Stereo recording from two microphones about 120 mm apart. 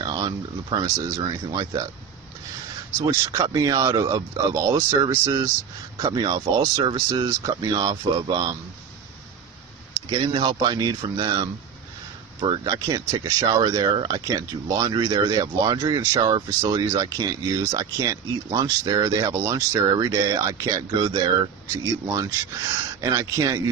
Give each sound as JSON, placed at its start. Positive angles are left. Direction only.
{"t": 0.0, "sound": "speech", "side_deg": -40}
{"t": 3.1, "sound": "speech", "side_deg": -30}
{"t": 10.1, "sound": "speech", "side_deg": -40}